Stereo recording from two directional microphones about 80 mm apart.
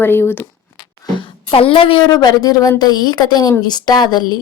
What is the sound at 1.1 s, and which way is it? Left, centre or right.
A woman's voice, left.